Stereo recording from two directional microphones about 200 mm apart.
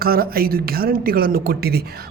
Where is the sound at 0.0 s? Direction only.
50° right (ahead or behind).